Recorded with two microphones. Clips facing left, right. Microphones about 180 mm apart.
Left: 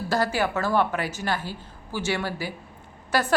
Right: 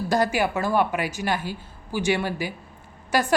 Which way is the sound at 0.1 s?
15° right (ahead or behind).